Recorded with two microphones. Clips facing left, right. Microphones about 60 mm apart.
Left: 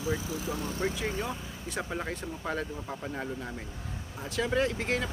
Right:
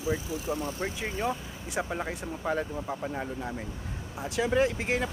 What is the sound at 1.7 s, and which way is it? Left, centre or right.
Speech, centre.